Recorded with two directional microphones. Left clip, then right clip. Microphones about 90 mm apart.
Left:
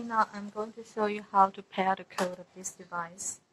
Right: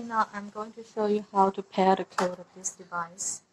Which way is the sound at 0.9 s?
35° right (ahead or behind).